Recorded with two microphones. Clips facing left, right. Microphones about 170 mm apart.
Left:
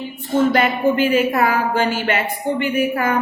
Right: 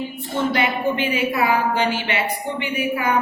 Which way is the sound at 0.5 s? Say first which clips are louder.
Left 4 dB; 45° left (ahead or behind).